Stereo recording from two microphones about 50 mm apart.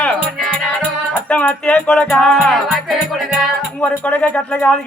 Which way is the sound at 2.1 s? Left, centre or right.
Centre.